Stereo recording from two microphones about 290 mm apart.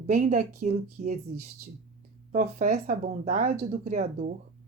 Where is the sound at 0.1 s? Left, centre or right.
Right.